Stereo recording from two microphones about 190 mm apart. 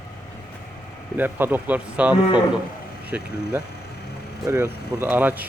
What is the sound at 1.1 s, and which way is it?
A man's voice, 10° right (ahead or behind).